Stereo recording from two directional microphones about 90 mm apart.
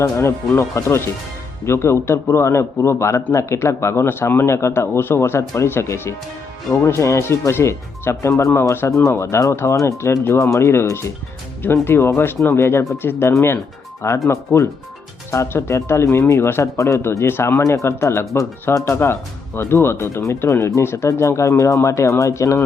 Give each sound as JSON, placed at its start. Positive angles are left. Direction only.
{"t": 0.0, "sound": "a man's voice", "side_deg": 30}